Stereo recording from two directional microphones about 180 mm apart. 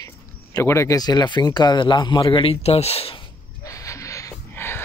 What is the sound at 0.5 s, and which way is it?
Speech, 15° left (ahead or behind).